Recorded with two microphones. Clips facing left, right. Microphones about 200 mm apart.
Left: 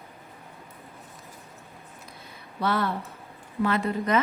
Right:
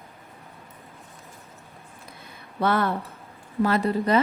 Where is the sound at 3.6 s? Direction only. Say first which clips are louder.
Right 3 dB; 35° right (ahead or behind).